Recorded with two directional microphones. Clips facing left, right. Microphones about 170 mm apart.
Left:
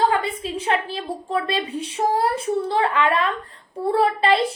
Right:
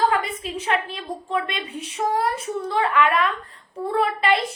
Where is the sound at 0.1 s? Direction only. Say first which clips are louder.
Left 2 dB; 30° left (ahead or behind).